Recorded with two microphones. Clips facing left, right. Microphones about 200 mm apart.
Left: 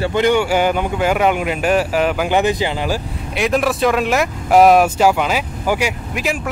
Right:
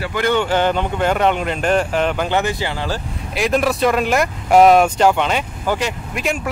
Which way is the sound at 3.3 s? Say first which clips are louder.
Even; centre (ahead or behind).